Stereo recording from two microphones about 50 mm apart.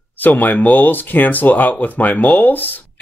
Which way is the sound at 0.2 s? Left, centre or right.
Left.